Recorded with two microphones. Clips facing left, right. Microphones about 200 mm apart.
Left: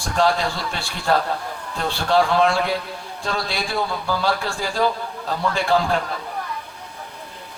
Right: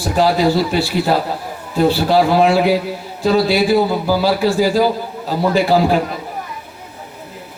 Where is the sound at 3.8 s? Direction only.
35° right (ahead or behind).